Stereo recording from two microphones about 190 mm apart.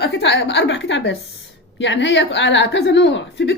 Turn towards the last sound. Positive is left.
turn(degrees=70)  # may be behind; listen again after turning